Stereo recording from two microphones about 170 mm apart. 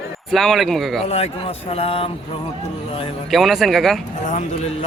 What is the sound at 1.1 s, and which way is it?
Speech, 35° left (ahead or behind).